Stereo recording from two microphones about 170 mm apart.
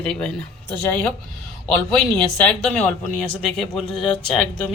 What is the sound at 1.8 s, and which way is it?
Speech, 5° left (ahead or behind).